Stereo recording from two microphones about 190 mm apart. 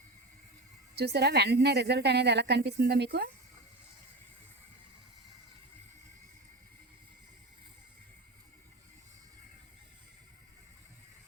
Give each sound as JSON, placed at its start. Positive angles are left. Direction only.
{"t": 0.9, "sound": "a woman's voice", "side_deg": -60}